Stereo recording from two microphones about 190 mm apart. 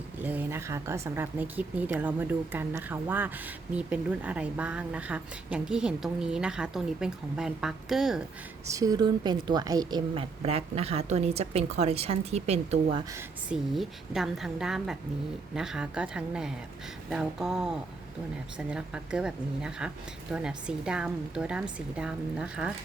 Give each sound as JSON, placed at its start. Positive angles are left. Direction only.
{"t": 0.2, "sound": "speech", "side_deg": -10}
{"t": 8.7, "sound": "a woman's voice", "side_deg": -20}
{"t": 13.1, "sound": "speech", "side_deg": -5}